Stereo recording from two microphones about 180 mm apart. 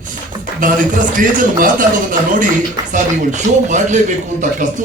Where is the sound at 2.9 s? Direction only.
45° right (ahead or behind).